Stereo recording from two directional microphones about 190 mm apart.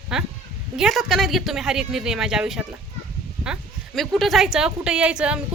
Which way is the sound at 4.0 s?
Centre (ahead or behind).